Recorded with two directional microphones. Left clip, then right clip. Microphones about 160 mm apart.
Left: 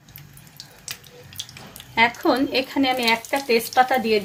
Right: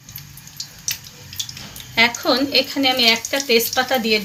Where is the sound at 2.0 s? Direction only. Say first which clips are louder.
Right 2 dB; 55° left (ahead or behind).